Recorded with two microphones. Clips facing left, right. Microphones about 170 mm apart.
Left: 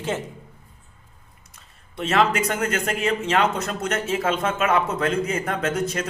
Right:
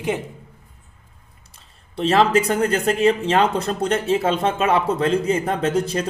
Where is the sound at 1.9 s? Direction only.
35° right (ahead or behind).